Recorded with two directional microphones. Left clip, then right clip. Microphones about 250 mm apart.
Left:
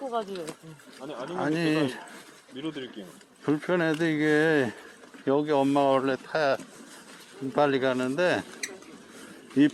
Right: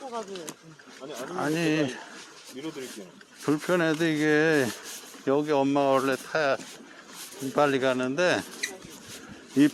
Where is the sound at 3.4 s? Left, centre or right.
Centre.